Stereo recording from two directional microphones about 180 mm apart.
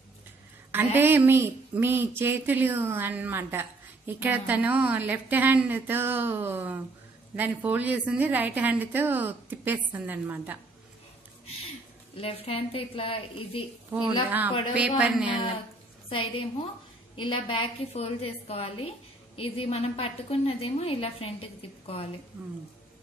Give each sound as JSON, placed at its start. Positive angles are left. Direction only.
{"t": 0.9, "sound": "speech", "side_deg": -10}
{"t": 12.2, "sound": "a woman's voice", "side_deg": 30}
{"t": 14.7, "sound": "speech", "side_deg": -5}
{"t": 16.1, "sound": "a woman's voice", "side_deg": 30}